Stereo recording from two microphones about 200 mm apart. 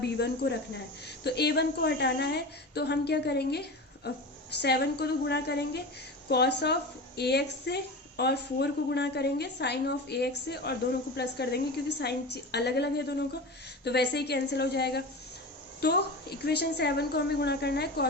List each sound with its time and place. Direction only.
0.0 s a woman's voice: 55° left (ahead or behind)